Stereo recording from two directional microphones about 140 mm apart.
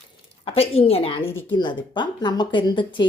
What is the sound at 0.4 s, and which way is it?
Speech, 45° left (ahead or behind).